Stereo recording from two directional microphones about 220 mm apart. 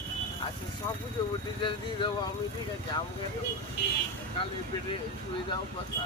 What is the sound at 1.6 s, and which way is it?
Speech, 20° left (ahead or behind).